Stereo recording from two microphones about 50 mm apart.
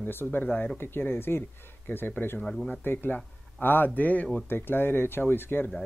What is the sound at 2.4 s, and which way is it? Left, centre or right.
Speech, centre.